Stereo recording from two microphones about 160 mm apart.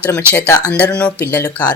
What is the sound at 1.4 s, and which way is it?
Speech, 25° left (ahead or behind).